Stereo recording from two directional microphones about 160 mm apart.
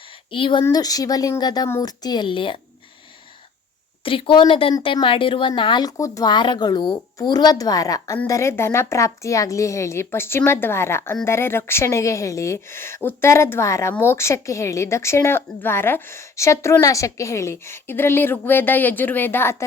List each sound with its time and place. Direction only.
0.3 s a woman's voice: 30° left (ahead or behind)
4.0 s a woman's voice: 35° left (ahead or behind); by 19.6 s 15° left (ahead or behind)